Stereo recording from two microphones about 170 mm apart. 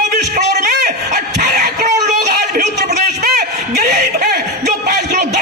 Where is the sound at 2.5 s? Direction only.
60° right (ahead or behind).